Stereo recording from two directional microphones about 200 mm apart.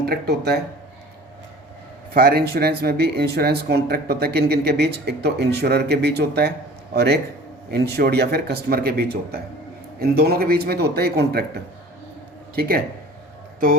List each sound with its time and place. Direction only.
0.0 s speech: 50° right (ahead or behind)
2.1 s speech: 50° right (ahead or behind)